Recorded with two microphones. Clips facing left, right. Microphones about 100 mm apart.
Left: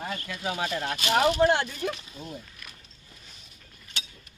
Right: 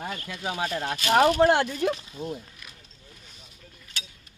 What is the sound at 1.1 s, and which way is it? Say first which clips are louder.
Speech: right 3 dB; 45° right (ahead or behind).